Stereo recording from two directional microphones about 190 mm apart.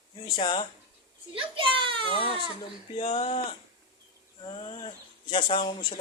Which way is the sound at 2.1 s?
30° left (ahead or behind).